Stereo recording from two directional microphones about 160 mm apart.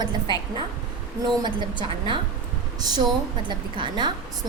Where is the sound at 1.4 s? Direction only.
30° right (ahead or behind).